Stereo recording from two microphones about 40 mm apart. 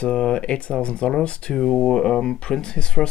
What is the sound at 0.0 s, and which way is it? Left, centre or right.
Speech, left.